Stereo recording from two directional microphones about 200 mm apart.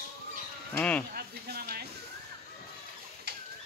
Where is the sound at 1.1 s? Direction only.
50° right (ahead or behind).